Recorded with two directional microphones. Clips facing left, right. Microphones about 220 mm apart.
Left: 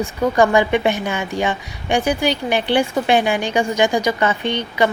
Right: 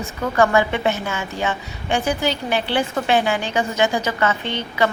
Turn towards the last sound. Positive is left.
turn(degrees=15)  # may be behind; listen again after turning